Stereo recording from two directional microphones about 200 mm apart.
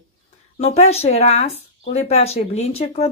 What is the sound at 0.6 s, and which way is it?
Speech, 30° left (ahead or behind).